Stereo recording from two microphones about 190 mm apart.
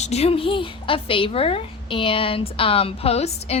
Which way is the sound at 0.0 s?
35° left (ahead or behind).